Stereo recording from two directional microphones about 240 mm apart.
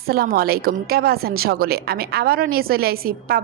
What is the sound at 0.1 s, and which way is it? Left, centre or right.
A woman's voice, right.